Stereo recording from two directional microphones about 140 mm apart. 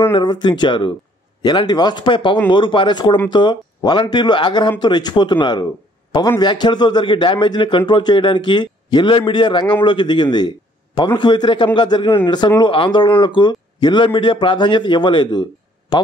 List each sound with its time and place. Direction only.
0.1 s a man's voice: 30° left (ahead or behind)